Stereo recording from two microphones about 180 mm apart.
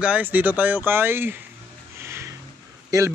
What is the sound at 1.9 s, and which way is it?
Music, 15° right (ahead or behind).